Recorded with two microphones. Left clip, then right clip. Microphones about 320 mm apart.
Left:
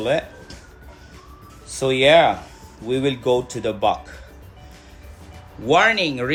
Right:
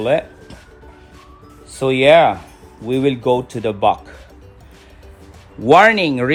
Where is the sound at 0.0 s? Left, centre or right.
Right.